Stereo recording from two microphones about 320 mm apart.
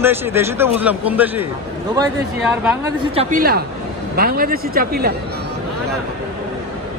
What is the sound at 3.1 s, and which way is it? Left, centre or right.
A man's voice, right.